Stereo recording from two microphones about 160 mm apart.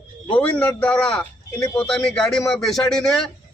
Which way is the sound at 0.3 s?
10° left (ahead or behind).